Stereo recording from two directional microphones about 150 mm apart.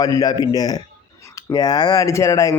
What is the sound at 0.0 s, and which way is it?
Speech, 25° left (ahead or behind).